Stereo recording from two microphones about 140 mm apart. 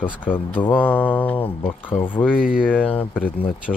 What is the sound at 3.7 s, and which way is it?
Speech, 15° left (ahead or behind).